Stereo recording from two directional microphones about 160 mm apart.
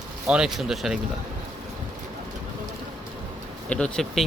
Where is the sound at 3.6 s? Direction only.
5° left (ahead or behind).